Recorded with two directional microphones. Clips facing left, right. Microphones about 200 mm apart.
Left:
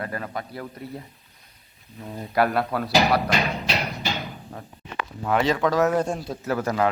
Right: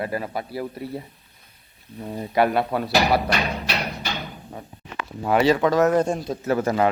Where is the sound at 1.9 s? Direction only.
20° right (ahead or behind).